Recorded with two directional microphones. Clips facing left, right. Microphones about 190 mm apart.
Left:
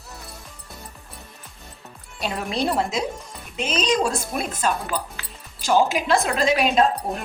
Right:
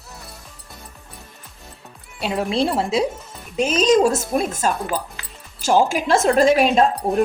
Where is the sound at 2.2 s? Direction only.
25° right (ahead or behind).